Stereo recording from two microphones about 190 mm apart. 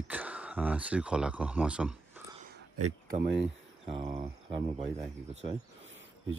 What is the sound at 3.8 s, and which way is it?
Speech, 30° right (ahead or behind).